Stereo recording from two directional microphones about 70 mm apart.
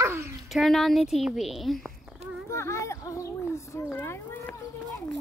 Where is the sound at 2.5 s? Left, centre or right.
Left.